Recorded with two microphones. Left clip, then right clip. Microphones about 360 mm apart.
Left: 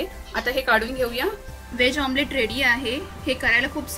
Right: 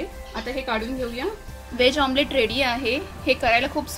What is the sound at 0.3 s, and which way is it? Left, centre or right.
Speech, left.